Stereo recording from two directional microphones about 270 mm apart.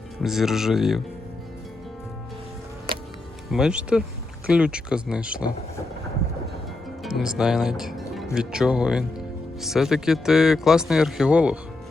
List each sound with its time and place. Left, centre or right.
0.2 s speech: centre
3.5 s speech: centre
7.0 s speech: centre